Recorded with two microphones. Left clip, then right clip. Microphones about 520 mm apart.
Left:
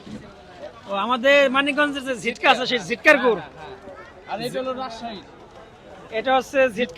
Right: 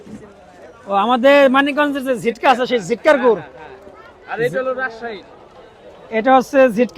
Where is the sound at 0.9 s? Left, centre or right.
Right.